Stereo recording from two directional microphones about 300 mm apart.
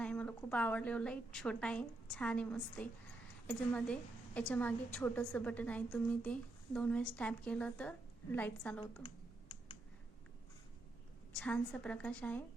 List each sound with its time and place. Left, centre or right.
0.0 s a woman's voice: centre
8.8 s computer keyboard: centre
11.3 s a woman's voice: centre